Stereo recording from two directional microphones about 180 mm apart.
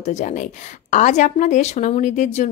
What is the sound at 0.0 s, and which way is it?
Speech, 40° left (ahead or behind).